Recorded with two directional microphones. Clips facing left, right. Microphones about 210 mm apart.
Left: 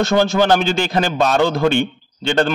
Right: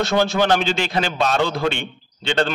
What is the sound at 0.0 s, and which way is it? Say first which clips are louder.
A man's voice: left 3 dB; 45° left (ahead or behind).